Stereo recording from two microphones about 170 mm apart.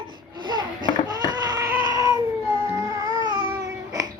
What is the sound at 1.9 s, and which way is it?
Cat, 20° right (ahead or behind).